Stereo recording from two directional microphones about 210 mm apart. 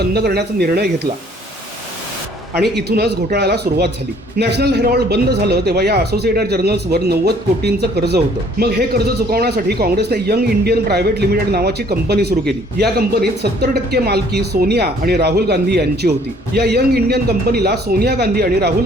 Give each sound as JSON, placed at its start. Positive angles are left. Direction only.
{"t": 0.0, "sound": "a man's voice", "side_deg": -50}
{"t": 2.6, "sound": "a man's voice", "side_deg": -50}